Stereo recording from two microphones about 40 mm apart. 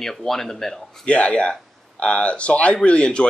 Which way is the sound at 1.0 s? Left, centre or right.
Left.